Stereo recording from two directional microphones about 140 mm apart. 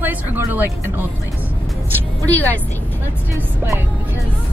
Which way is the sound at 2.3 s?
10° left (ahead or behind).